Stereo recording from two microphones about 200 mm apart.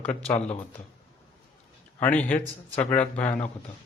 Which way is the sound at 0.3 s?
30° left (ahead or behind).